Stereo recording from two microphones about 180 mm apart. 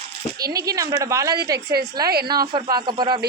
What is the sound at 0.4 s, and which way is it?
Speech, 20° right (ahead or behind).